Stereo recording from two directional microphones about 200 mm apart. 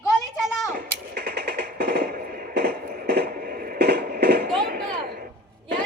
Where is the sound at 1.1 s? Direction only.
50° right (ahead or behind).